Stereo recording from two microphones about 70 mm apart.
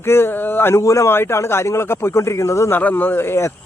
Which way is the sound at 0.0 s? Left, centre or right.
Left.